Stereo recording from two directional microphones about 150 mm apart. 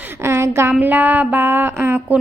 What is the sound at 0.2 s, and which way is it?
A woman's voice, 15° right (ahead or behind).